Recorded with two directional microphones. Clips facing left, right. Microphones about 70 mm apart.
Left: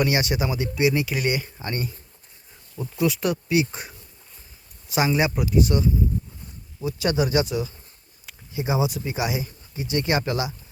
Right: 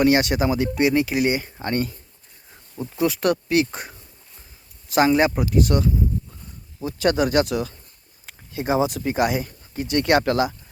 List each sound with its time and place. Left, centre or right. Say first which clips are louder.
0.0 s speech: right 5 dB; right
1.1 s speech: right 4 dB; right
1.6 s speech: right 9 dB; right
2.9 s speech: right 1 dB; right
3.2 s speech: right 3 dB; right
8.3 s speech: right 4 dB; right